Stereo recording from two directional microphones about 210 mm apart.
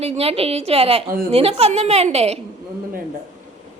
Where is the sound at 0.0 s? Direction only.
30° right (ahead or behind).